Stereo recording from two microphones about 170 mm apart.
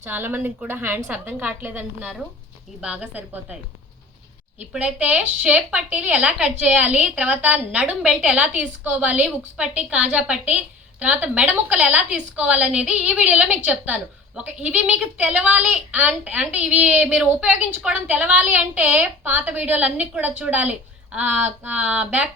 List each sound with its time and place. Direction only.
0.0 s a woman's voice: 10° right (ahead or behind)
4.7 s a woman's voice: 10° right (ahead or behind)